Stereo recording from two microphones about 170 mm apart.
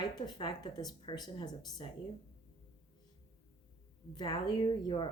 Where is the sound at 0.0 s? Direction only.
25° left (ahead or behind).